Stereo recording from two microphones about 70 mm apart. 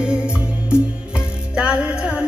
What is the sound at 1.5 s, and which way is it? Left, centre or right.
Music, centre.